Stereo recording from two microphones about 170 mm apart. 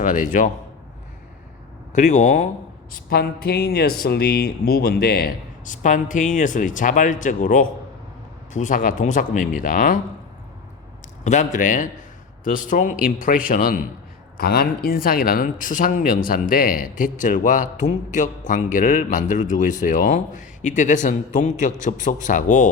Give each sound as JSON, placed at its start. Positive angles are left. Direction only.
{"t": 0.0, "sound": "speech", "side_deg": 50}
{"t": 1.9, "sound": "speech", "side_deg": 45}
{"t": 2.9, "sound": "speech", "side_deg": 65}
{"t": 5.6, "sound": "speech", "side_deg": 50}
{"t": 11.2, "sound": "a man's voice", "side_deg": 45}